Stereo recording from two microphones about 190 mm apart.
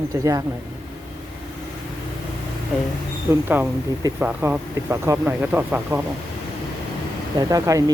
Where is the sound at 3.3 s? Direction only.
10° right (ahead or behind).